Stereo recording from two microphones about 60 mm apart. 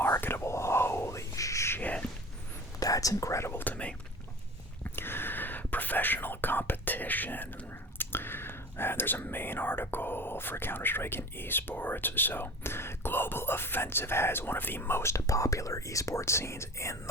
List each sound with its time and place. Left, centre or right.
0.0 s whispering: left
1.8 s a sound: left
2.8 s whispering: left
3.5 s whispering: left
4.8 s whispering: left